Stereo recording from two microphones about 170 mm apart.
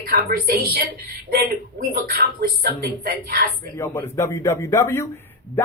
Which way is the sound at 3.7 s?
15° left (ahead or behind).